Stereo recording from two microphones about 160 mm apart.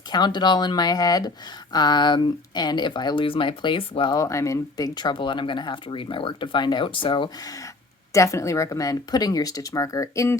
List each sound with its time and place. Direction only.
0.1 s speech: 25° left (ahead or behind)
4.2 s speech: 20° left (ahead or behind)